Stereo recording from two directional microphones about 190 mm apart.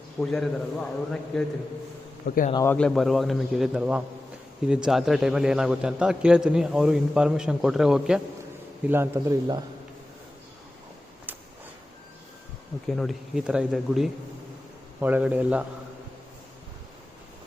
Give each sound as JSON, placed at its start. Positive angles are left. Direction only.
{"t": 0.2, "sound": "a man's voice", "side_deg": 5}
{"t": 2.2, "sound": "a man's voice", "side_deg": 50}
{"t": 2.6, "sound": "a man's voice", "side_deg": 5}
{"t": 8.9, "sound": "a man's voice", "side_deg": -15}
{"t": 12.9, "sound": "a man's voice", "side_deg": 0}